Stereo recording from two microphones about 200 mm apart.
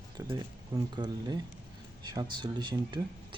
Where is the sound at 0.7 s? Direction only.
20° right (ahead or behind).